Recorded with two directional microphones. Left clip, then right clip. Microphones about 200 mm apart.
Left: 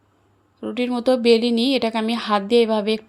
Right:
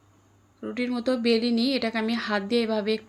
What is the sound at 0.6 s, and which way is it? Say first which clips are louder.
Speech: left 6 dB; 30° left (ahead or behind).